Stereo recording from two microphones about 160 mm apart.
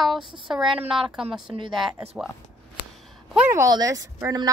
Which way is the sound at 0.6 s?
30° right (ahead or behind).